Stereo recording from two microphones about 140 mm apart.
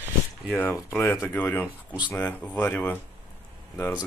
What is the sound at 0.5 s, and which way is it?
Speech, 15° left (ahead or behind).